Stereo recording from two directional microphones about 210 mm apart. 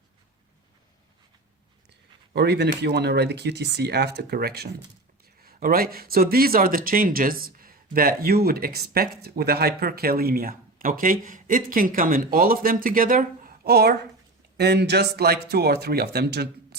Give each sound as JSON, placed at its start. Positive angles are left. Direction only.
{"t": 2.3, "sound": "speech", "side_deg": -50}